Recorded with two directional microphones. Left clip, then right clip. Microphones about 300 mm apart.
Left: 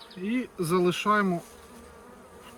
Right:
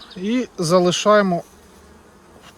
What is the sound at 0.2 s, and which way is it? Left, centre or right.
Speech, centre.